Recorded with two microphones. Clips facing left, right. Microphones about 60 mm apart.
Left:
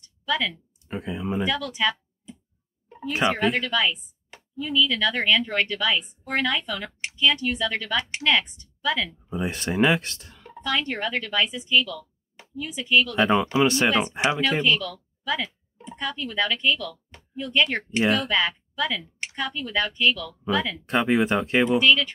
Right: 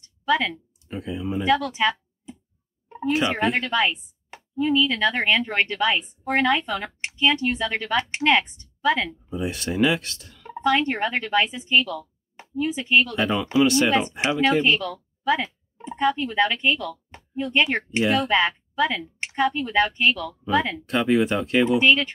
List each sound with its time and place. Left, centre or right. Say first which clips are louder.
0.0 s a sound: right 4 dB; right
0.8 s speech: even; left
1.4 s speech: right 6 dB; right
3.3 s a woman's voice: right 1 dB; right
9.3 s speech: left 2 dB; left
10.4 s speech: right 6 dB; right
13.1 s speech: left 1 dB; left
14.6 s a woman's voice: right 2 dB; right
20.8 s speech: right 1 dB; left
21.7 s a woman's voice: even; right